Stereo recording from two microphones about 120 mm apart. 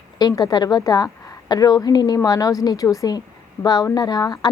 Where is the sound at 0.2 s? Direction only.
35° left (ahead or behind).